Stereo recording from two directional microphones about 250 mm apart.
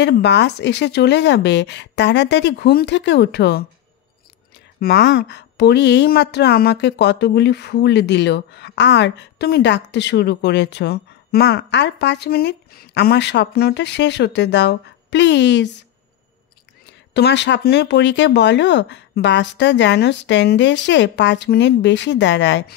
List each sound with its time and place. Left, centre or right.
0.0 s a woman's voice: left
4.7 s a woman's voice: left
17.1 s a woman's voice: left